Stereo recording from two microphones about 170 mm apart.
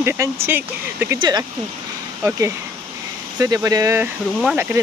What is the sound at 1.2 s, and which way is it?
Speech, 25° right (ahead or behind).